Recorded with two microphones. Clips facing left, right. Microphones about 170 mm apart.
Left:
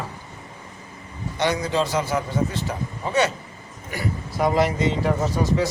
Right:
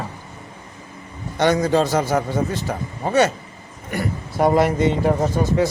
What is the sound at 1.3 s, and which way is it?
A man's voice, 50° right (ahead or behind).